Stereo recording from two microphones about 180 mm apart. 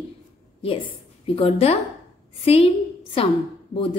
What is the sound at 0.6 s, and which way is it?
A woman's voice, 30° left (ahead or behind).